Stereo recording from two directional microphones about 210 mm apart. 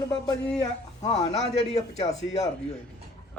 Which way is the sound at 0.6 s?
30° left (ahead or behind).